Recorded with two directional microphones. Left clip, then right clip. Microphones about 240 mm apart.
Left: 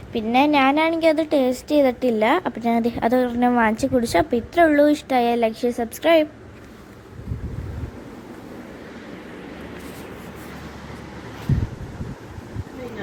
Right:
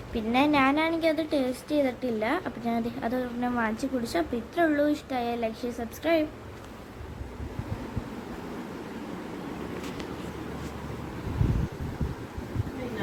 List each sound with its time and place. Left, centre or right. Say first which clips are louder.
0.1 s a woman's voice: left 7 dB; centre